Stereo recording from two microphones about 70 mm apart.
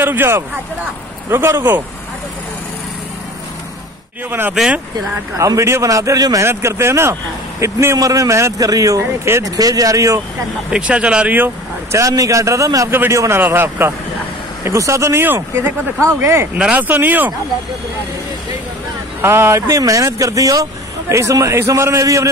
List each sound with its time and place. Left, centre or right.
0.0 s speech: right
4.3 s speech: right
5.4 s speech: right
6.4 s speech: right
10.7 s speech: centre
11.9 s speech: right
13.4 s speech: right
14.6 s speech: right
16.5 s speech: centre
19.2 s speech: right